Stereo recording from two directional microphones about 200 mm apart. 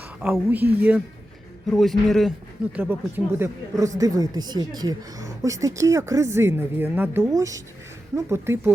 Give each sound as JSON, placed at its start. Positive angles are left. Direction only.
{"t": 0.2, "sound": "a man's voice", "side_deg": -5}